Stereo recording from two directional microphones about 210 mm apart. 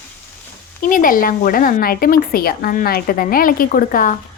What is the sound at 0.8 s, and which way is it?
A woman's voice, 40° left (ahead or behind).